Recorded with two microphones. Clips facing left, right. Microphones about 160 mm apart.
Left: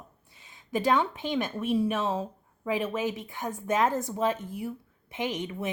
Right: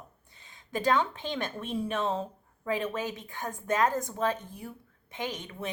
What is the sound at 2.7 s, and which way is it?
A woman's voice, 15° left (ahead or behind).